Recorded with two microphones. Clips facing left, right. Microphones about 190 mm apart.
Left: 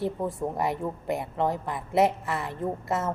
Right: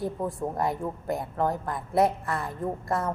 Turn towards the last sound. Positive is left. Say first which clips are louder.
# even
turn(degrees=5)  # may be behind; listen again after turning